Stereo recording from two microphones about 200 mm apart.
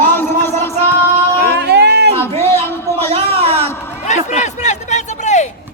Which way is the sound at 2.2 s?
10° left (ahead or behind).